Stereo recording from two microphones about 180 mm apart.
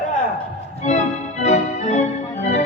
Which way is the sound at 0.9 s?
40° left (ahead or behind).